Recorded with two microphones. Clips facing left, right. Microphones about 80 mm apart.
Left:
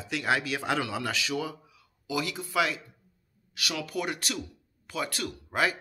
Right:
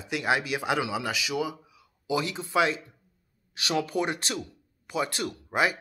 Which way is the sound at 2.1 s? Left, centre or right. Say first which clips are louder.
Right 3 dB; right.